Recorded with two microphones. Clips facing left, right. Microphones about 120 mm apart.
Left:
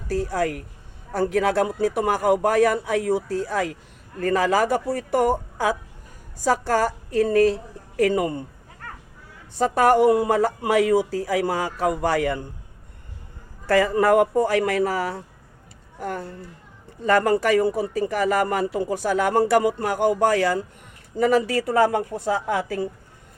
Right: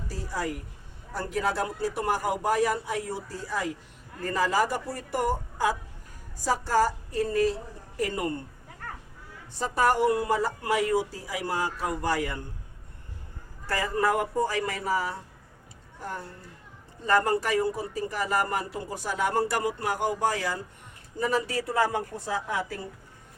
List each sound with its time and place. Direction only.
0.1 s a man's voice: 65° left (ahead or behind)
1.1 s a man's voice: 80° left
9.6 s speech: 65° left (ahead or behind)
13.7 s a man's voice: 85° left
16.0 s a man's voice: 70° left (ahead or behind)
21.2 s a man's voice: 85° left